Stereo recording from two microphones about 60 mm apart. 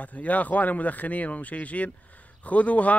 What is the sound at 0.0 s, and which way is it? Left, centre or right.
Speech, left.